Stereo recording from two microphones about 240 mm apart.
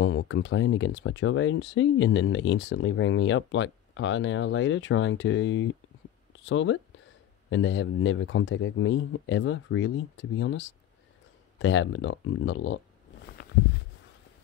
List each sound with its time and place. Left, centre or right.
0.0 s speech: left